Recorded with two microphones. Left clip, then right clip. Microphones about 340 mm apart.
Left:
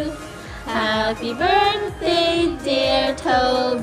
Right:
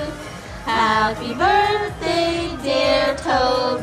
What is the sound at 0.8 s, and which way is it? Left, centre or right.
Music, left.